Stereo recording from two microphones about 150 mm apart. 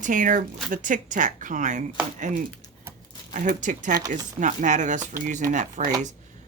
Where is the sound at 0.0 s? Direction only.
60° right (ahead or behind).